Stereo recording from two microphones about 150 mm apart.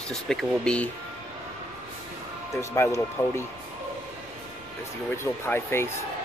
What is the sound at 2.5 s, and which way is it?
Speech, 20° left (ahead or behind).